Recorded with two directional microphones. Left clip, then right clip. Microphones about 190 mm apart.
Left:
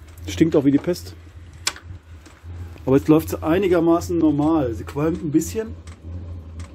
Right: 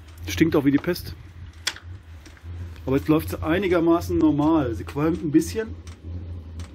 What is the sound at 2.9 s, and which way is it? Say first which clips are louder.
Speech: left 5 dB; 30° left (ahead or behind).